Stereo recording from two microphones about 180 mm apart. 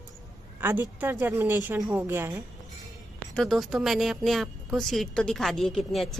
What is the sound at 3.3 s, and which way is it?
A woman's voice, 5° left (ahead or behind).